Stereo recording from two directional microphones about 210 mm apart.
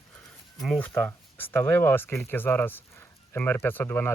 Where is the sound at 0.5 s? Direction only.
Centre (ahead or behind).